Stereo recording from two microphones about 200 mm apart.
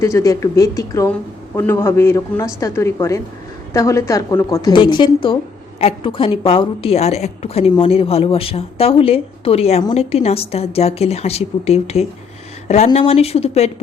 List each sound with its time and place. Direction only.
0.0 s a woman's voice: 15° left (ahead or behind); by 13.7 s 30° left (ahead or behind)